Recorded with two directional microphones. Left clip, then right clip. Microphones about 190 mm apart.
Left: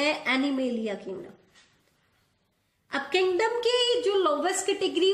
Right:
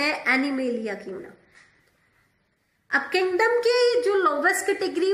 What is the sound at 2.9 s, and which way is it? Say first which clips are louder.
A woman's voice: right 3 dB; 50° left (ahead or behind).